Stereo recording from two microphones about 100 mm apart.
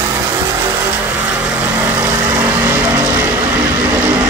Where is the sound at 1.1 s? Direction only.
15° right (ahead or behind).